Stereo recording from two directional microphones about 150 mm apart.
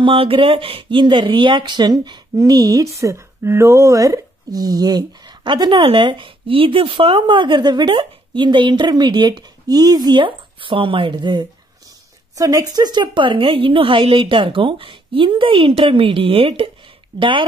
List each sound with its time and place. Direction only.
0.0 s speech: 35° right (ahead or behind)